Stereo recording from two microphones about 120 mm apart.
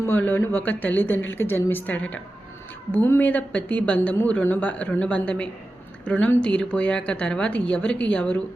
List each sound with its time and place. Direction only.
0.0 s speech: 15° left (ahead or behind)